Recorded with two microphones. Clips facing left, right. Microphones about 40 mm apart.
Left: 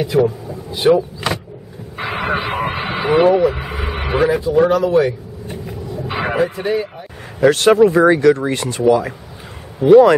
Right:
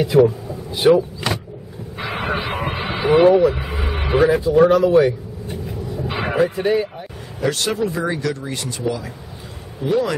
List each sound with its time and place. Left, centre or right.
0.1 s speech: centre
2.0 s vehicle: centre
3.3 s speech: centre
4.3 s speech: centre
5.5 s vehicle: centre
7.3 s speech: left